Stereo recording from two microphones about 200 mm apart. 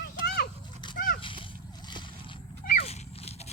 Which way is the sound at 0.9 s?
45° left (ahead or behind).